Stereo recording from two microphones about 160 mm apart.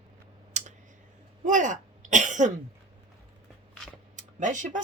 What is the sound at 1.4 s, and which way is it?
Speech, 50° right (ahead or behind).